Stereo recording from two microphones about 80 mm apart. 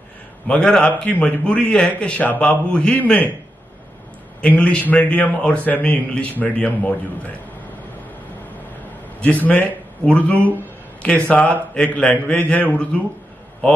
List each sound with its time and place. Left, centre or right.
0.5 s a man's voice: centre
4.4 s a man's voice: centre
9.2 s a man's voice: centre